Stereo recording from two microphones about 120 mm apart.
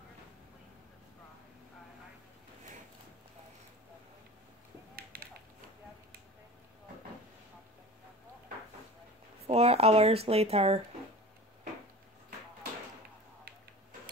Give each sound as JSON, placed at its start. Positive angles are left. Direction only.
{"t": 9.5, "sound": "speech", "side_deg": -60}